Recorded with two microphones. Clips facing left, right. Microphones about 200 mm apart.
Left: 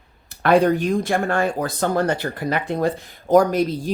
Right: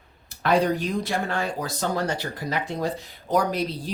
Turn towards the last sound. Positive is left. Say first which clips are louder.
# left 7 dB
turn(degrees=45)  # may be behind; listen again after turning